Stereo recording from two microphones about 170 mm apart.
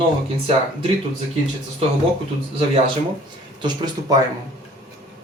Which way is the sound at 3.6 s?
25° right (ahead or behind).